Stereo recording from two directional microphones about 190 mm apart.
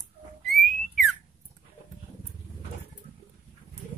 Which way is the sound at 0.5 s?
Centre (ahead or behind).